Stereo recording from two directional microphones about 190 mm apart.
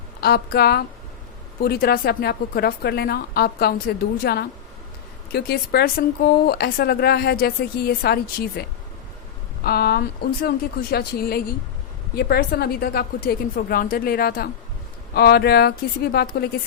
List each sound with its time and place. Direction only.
0.2 s speech: 55° left (ahead or behind)
9.6 s a woman's voice: 55° left (ahead or behind)